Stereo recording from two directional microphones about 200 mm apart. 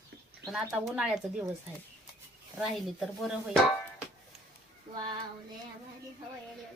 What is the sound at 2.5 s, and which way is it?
Speech, centre (ahead or behind).